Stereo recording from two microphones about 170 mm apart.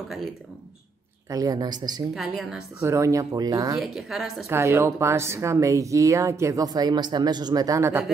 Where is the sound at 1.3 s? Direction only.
20° right (ahead or behind).